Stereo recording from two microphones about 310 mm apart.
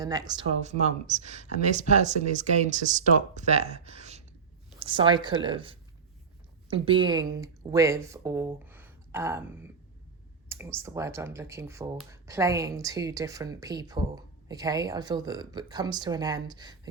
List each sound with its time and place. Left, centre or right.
0.0 s speech: centre